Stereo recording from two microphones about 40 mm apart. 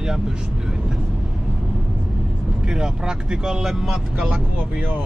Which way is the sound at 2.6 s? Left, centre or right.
Centre.